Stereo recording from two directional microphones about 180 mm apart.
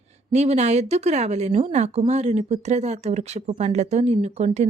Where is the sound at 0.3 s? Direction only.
40° right (ahead or behind).